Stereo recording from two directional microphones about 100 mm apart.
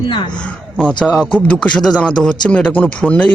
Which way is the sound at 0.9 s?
10° left (ahead or behind).